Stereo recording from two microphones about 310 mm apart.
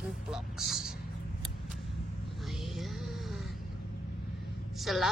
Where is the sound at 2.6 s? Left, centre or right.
Centre.